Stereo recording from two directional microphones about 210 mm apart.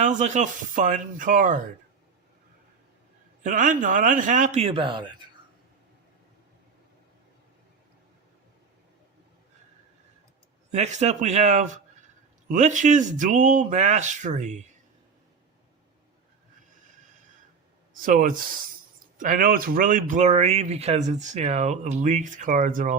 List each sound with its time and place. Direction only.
0.0 s speech: 35° right (ahead or behind)
3.4 s speech: 40° right (ahead or behind)
10.7 s speech: 35° right (ahead or behind)
17.9 s speech: 40° right (ahead or behind)